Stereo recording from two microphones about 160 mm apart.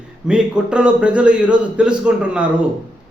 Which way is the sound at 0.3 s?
5° right (ahead or behind).